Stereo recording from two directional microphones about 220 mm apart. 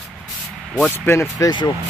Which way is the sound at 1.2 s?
15° left (ahead or behind).